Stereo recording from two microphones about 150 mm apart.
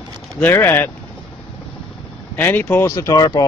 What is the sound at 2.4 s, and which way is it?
Speech, 15° left (ahead or behind).